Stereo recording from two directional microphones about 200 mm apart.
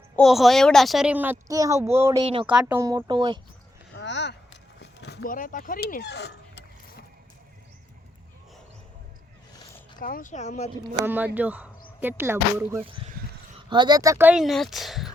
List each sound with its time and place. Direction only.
0.2 s a woman's voice: centre (ahead or behind)
2.2 s speech: 25° right (ahead or behind)
2.5 s a woman's voice: 5° right (ahead or behind); by 3.4 s 20° right (ahead or behind)
3.9 s a sound: 60° left (ahead or behind)
4.8 s speech: 55° left (ahead or behind)
10.0 s speech: 45° left (ahead or behind)
11.0 s a woman's voice: 10° right (ahead or behind)
12.8 s speech: 25° right (ahead or behind); by 15.1 s centre (ahead or behind)